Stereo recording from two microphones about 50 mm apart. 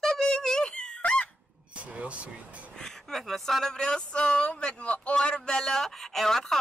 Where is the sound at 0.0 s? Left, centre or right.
Centre.